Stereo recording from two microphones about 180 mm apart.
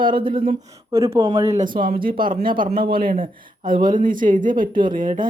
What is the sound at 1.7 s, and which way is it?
Speech, 50° right (ahead or behind).